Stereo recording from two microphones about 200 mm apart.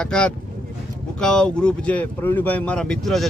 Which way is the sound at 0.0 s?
5° left (ahead or behind).